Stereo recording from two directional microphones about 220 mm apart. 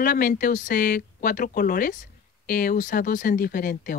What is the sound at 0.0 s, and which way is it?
Speech, 40° left (ahead or behind).